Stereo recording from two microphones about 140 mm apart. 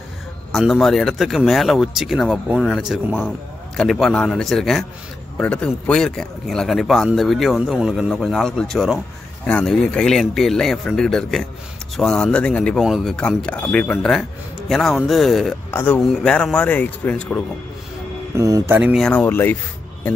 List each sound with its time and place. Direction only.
0.5 s speech: centre (ahead or behind)
15.7 s speech: 15° left (ahead or behind)
18.3 s speech: 20° right (ahead or behind)
18.8 s speech: 5° right (ahead or behind)
19.0 s speech: 10° left (ahead or behind)